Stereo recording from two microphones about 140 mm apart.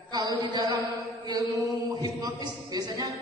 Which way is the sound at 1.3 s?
25° right (ahead or behind).